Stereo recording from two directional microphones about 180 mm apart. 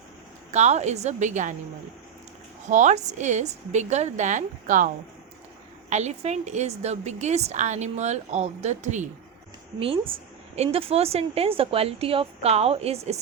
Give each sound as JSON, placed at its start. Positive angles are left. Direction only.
{"t": 0.5, "sound": "a woman's voice", "side_deg": -40}
{"t": 2.6, "sound": "a woman's voice", "side_deg": -40}
{"t": 5.9, "sound": "a woman's voice", "side_deg": -40}
{"t": 10.5, "sound": "a woman's voice", "side_deg": -35}